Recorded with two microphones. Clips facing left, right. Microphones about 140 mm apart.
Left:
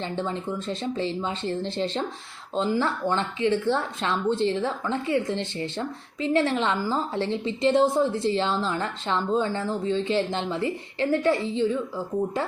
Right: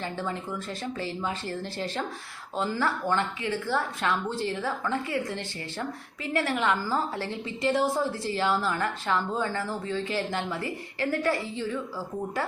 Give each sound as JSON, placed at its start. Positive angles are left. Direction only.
{"t": 0.0, "sound": "a woman's voice", "side_deg": 25}